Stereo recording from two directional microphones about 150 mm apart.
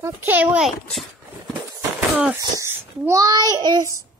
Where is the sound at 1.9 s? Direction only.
5° right (ahead or behind).